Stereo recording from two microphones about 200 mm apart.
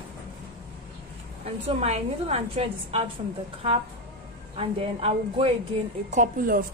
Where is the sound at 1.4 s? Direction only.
30° right (ahead or behind).